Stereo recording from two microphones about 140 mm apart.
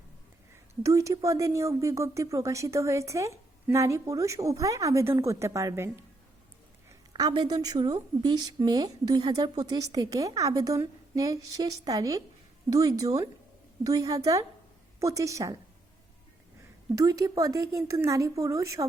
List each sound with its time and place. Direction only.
0.5 s speech: 20° right (ahead or behind)
7.1 s speech: 30° right (ahead or behind)
16.9 s speech: 25° right (ahead or behind)